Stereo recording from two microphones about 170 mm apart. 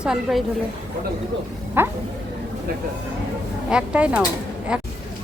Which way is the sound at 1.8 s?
10° right (ahead or behind).